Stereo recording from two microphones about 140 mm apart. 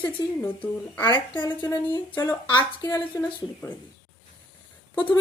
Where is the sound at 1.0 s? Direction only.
35° left (ahead or behind).